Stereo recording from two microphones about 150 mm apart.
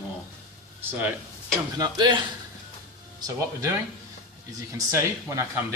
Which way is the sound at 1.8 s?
30° right (ahead or behind).